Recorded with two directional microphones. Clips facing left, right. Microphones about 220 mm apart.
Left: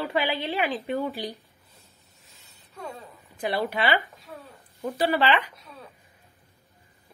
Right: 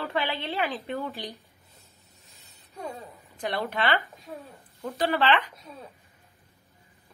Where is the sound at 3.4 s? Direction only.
5° left (ahead or behind).